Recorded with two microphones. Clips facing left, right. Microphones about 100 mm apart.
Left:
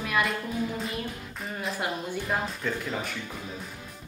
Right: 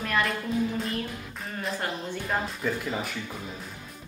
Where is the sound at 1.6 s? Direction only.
5° left (ahead or behind).